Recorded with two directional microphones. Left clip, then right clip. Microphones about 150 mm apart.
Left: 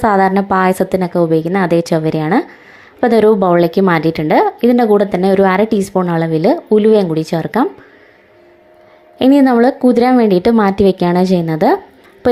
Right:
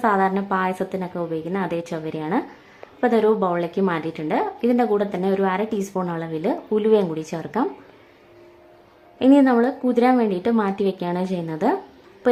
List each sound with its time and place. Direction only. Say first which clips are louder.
0.0 s a woman's voice: left 8 dB; 45° left (ahead or behind)
9.1 s a woman's voice: left 6 dB; 45° left (ahead or behind)